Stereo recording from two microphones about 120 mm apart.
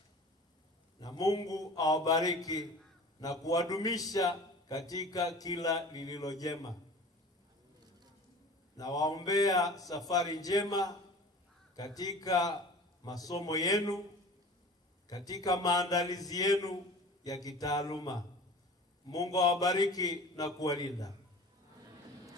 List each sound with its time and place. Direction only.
0.9 s speech: 30° left (ahead or behind)
8.7 s mantra: 30° left (ahead or behind)
9.8 s speech: 30° left (ahead or behind)
15.0 s speech: 30° left (ahead or behind)